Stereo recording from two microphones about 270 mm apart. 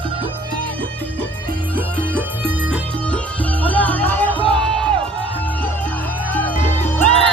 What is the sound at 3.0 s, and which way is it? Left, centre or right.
Music, centre.